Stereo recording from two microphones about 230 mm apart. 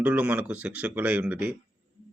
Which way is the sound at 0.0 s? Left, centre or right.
Centre.